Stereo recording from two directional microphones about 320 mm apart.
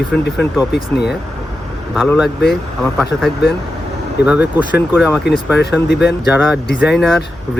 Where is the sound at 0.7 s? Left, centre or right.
Left.